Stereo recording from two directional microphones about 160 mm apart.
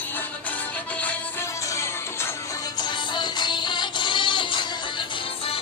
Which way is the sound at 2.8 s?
30° left (ahead or behind).